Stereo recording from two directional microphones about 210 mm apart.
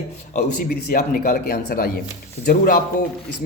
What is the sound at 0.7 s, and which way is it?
A man's voice, 40° left (ahead or behind).